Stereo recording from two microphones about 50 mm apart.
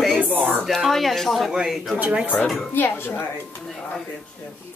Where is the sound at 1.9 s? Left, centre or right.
Right.